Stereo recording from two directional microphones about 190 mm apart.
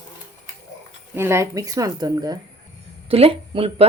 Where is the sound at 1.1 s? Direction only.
15° right (ahead or behind); by 3.8 s 30° right (ahead or behind).